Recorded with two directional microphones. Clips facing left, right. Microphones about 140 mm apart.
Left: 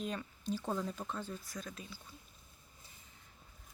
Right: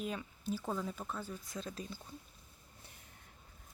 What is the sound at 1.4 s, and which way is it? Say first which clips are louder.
Speech: right 2 dB; 25° right (ahead or behind).